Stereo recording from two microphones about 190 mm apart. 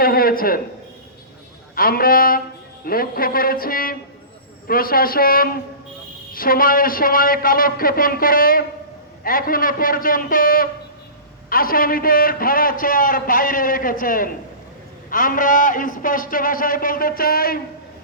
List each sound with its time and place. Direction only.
0.0 s speech: 50° left (ahead or behind)
1.7 s a man's voice: 50° left (ahead or behind)